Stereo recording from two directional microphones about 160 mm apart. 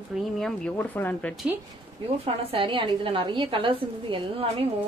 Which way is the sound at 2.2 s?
35° right (ahead or behind).